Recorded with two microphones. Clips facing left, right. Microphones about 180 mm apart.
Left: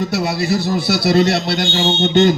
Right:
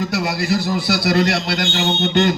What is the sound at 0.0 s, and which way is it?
A man's voice, 25° left (ahead or behind).